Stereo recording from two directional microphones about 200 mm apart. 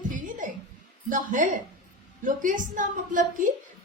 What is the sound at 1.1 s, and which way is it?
Speech, 40° right (ahead or behind).